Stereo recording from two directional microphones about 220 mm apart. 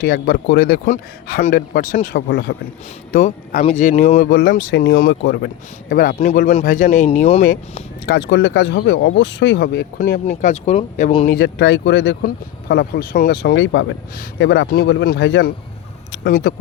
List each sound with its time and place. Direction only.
0.0 s speech: 40° left (ahead or behind)
7.5 s speech: 40° left (ahead or behind)
10.0 s speech: 35° left (ahead or behind)
11.3 s speech: 50° left (ahead or behind)